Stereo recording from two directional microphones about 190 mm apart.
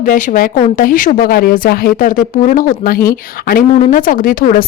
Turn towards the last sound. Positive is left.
turn(degrees=45)  # may be behind; listen again after turning